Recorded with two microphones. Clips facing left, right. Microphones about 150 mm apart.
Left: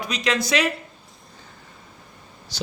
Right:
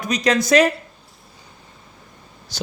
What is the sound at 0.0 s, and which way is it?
Speech, 45° right (ahead or behind).